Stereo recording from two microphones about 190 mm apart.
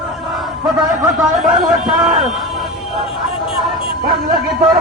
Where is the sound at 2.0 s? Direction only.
25° right (ahead or behind).